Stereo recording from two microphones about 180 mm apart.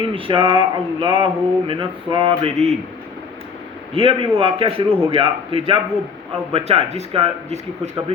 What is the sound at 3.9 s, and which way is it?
A man's voice, 30° right (ahead or behind).